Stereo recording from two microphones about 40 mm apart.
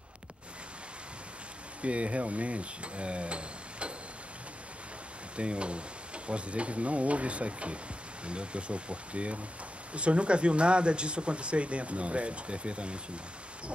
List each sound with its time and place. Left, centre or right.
1.8 s speech: right
5.3 s speech: right